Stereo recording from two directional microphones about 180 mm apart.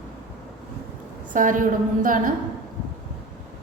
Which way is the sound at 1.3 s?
45° right (ahead or behind).